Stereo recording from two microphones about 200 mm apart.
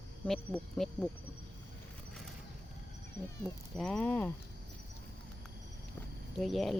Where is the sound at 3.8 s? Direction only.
5° left (ahead or behind).